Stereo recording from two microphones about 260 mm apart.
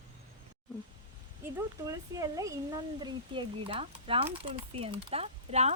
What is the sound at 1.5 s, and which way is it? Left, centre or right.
Speech, centre.